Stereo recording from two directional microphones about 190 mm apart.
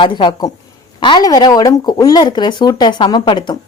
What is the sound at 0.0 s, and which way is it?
Speech, 25° left (ahead or behind).